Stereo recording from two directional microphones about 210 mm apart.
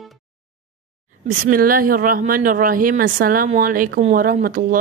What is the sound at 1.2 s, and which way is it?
A woman's voice, 45° right (ahead or behind).